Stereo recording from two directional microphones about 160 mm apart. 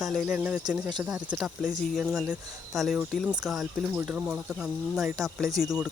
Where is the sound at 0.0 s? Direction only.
5° right (ahead or behind).